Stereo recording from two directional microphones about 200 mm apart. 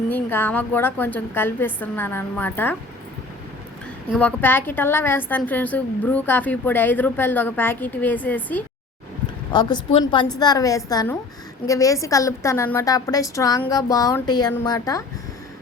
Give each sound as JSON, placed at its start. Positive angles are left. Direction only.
{"t": 0.1, "sound": "a woman's voice", "side_deg": 10}
{"t": 4.1, "sound": "a woman's voice", "side_deg": 5}
{"t": 9.5, "sound": "a woman's voice", "side_deg": 20}